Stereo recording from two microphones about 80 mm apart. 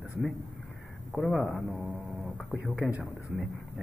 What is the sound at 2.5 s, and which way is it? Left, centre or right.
Speech, centre.